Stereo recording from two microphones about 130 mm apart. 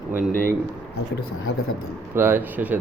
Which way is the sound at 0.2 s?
90° left.